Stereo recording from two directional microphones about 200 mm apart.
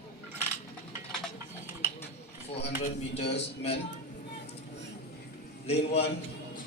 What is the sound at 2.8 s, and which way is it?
Speech, 30° left (ahead or behind).